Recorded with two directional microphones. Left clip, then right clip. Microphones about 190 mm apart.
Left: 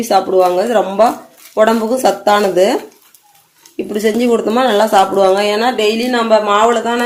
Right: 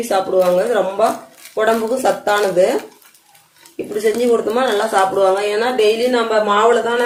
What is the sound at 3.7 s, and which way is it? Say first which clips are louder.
A woman's voice: left 2 dB; 50° left (ahead or behind).